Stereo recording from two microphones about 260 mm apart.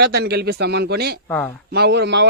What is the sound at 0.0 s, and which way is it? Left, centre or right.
A man's voice, right.